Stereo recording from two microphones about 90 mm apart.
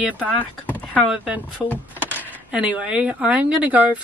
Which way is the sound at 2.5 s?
10° right (ahead or behind).